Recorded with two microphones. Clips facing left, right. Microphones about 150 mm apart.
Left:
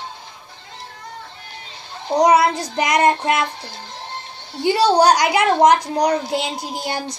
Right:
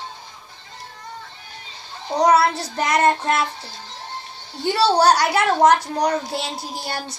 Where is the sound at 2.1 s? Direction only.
15° left (ahead or behind).